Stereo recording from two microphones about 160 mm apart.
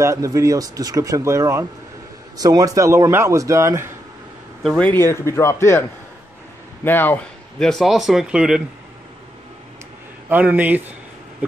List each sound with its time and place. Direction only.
0.0 s speech: 20° right (ahead or behind)
4.6 s a man's voice: 10° left (ahead or behind)
10.3 s speech: 10° right (ahead or behind)